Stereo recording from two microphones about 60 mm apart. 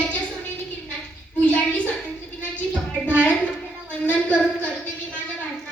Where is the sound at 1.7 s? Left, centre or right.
Left.